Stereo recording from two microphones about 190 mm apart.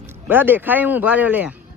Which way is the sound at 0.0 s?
10° right (ahead or behind).